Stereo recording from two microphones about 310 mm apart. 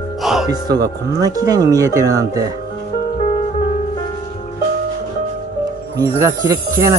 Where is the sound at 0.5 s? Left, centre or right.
Centre.